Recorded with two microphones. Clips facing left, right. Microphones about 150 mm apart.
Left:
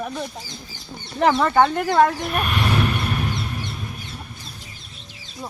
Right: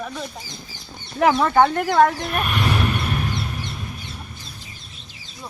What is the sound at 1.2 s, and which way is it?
Speech, 5° right (ahead or behind).